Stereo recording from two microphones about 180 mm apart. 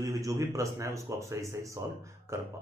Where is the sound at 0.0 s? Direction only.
15° right (ahead or behind).